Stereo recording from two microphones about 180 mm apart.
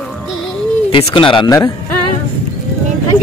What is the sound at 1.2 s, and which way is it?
Speech, 25° left (ahead or behind).